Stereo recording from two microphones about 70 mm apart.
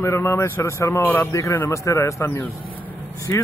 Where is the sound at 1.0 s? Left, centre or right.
Left.